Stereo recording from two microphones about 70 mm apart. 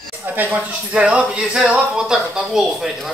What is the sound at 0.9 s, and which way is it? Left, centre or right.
Speech, centre.